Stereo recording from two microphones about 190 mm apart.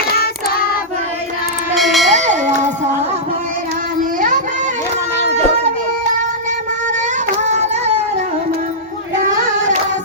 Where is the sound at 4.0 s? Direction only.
45° right (ahead or behind).